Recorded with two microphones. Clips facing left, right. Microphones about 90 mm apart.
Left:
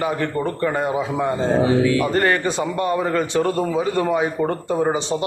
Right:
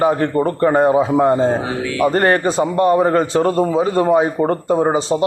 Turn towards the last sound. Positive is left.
turn(degrees=-30)  # may be behind; listen again after turning